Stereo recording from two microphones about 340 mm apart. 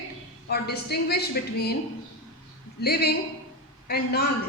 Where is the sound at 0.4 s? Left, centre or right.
Left.